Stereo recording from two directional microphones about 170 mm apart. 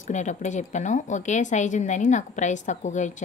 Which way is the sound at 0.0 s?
45° left (ahead or behind).